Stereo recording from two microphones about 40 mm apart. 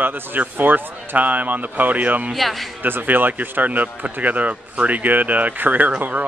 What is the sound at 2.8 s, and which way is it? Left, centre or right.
Speech, right.